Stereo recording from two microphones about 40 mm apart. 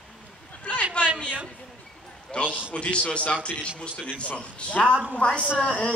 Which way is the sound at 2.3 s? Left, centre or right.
Left.